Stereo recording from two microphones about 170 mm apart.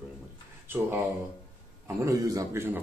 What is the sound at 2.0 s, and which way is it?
Speech, 20° right (ahead or behind).